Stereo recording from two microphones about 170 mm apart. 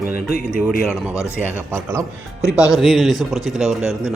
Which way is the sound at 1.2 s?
10° right (ahead or behind).